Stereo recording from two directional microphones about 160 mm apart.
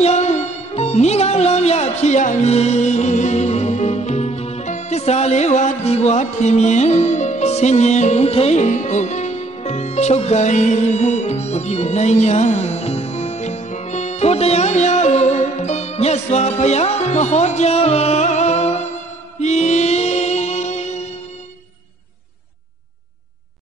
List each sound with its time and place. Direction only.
0.0 s music: 45° left (ahead or behind)